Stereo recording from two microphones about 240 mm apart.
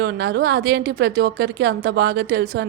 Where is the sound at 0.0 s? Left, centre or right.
Right.